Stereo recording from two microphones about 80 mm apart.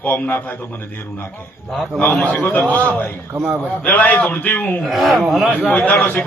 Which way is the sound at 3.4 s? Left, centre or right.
Centre.